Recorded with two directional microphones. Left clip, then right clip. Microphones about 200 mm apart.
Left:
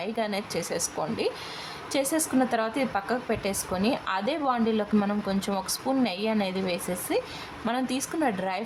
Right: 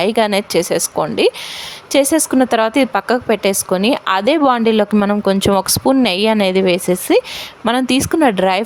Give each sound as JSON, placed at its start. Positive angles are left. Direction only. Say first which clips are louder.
{"t": 0.0, "sound": "a woman's voice", "louder": "right 15 dB", "side_deg": -50}